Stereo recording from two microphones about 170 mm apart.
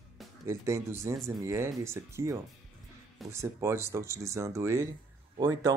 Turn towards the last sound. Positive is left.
turn(degrees=-20)  # may be behind; listen again after turning